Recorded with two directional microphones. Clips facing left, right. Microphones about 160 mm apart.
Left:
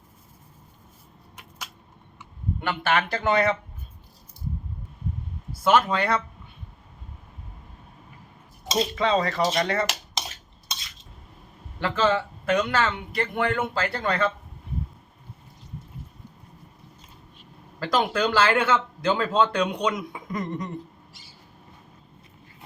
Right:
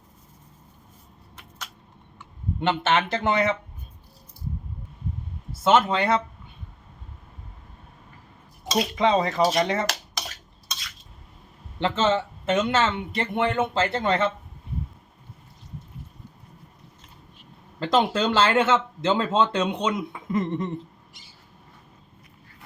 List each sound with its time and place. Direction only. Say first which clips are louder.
2.6 s speech: right 2 dB; 25° right (ahead or behind)
5.6 s speech: right 1 dB; 25° right (ahead or behind)
9.0 s speech: right 3 dB; 20° right (ahead or behind)
11.8 s speech: right 1 dB; 25° right (ahead or behind)
17.7 s speech: right 2 dB; 25° right (ahead or behind)